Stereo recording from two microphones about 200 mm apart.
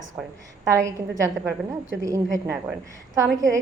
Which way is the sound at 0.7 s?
15° right (ahead or behind).